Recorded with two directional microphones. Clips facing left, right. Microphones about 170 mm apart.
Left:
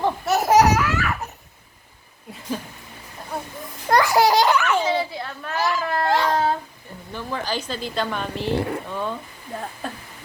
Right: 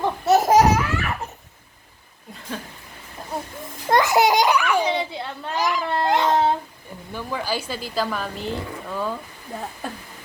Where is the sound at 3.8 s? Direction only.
20° right (ahead or behind).